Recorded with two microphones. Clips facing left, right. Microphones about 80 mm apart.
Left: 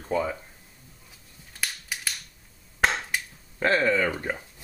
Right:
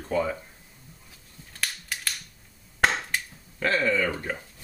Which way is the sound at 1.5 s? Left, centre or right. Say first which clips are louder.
Even; centre.